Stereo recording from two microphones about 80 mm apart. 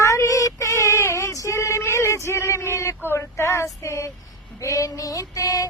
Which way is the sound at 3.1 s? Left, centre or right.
Left.